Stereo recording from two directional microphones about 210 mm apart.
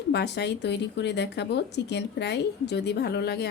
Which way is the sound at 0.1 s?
55° left (ahead or behind).